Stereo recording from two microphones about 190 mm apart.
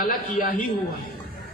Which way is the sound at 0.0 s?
45° left (ahead or behind).